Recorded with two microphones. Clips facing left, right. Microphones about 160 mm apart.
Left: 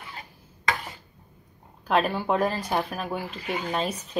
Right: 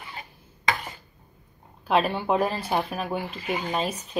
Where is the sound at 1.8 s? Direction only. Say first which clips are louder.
Right 1 dB; 5° right (ahead or behind).